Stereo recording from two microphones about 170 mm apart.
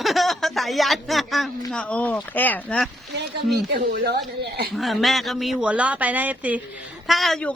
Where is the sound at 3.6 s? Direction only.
75° right (ahead or behind).